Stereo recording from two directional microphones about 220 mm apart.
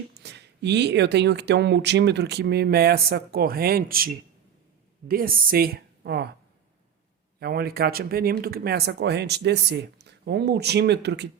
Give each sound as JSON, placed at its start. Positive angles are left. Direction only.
{"t": 0.1, "sound": "speech", "side_deg": -50}
{"t": 7.3, "sound": "speech", "side_deg": -45}